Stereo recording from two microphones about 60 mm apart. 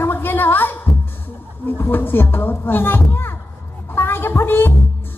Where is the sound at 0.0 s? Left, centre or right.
Left.